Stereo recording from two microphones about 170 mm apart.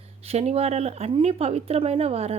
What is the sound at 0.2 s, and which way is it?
A woman's voice, 40° right (ahead or behind).